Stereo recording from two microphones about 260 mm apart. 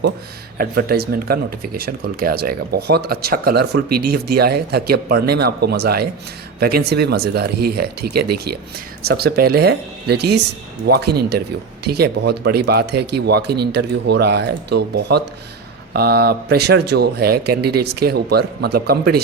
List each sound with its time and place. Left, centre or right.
0.6 s speech: right